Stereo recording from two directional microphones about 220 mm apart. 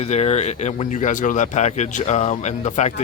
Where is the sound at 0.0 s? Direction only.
30° left (ahead or behind).